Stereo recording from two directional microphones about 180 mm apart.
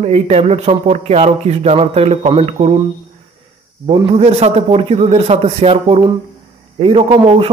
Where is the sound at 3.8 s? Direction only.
30° right (ahead or behind).